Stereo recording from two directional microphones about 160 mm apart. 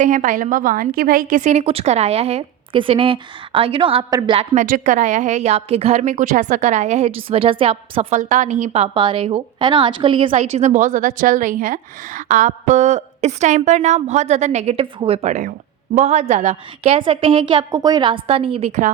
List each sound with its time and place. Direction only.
0.0 s a woman's voice: 55° right (ahead or behind); by 4.4 s 35° right (ahead or behind)
4.5 s a woman's voice: 55° right (ahead or behind); by 8.0 s 35° right (ahead or behind)
8.1 s a woman's voice: 55° right (ahead or behind); by 18.8 s 35° right (ahead or behind)